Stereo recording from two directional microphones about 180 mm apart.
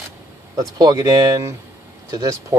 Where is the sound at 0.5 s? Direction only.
20° right (ahead or behind).